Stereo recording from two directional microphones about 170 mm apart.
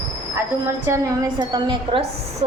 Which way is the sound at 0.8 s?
20° right (ahead or behind).